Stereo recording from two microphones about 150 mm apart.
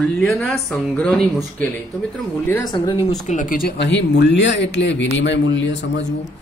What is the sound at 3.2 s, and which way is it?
Speech, 60° left (ahead or behind).